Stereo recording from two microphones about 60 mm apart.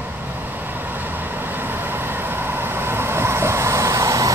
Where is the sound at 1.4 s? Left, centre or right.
Right.